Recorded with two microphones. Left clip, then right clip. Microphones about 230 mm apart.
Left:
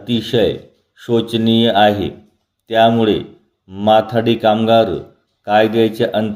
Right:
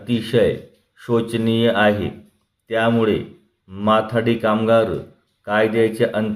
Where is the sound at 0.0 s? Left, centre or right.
Centre.